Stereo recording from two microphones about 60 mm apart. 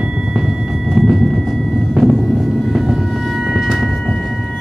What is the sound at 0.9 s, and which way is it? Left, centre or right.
Vehicle, centre.